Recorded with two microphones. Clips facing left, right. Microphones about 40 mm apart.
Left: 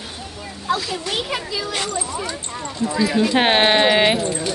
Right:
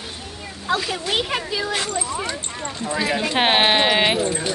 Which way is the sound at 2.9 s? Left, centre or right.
Right.